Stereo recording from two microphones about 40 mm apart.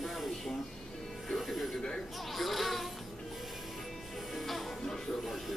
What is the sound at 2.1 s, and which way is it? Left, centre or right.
Music, centre.